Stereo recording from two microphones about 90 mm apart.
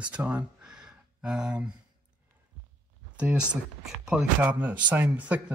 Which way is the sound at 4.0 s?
10° right (ahead or behind).